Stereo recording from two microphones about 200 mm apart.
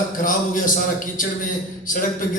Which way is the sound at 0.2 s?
45° left (ahead or behind).